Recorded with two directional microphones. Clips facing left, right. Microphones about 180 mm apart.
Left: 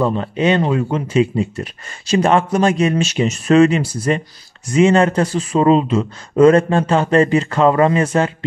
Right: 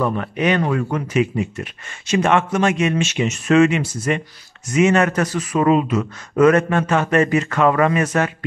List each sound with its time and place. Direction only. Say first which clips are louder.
0.0 s speech: left 3 dB; 25° left (ahead or behind)